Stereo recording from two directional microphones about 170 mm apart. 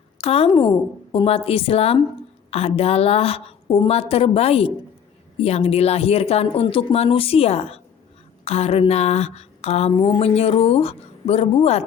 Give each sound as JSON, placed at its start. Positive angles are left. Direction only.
{"t": 0.2, "sound": "speech", "side_deg": 35}